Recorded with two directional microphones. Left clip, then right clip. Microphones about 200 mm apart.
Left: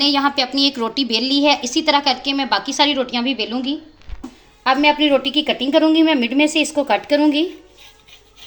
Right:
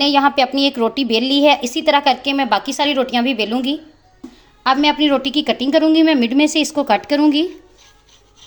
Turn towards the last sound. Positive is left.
turn(degrees=-55)  # may be behind; listen again after turning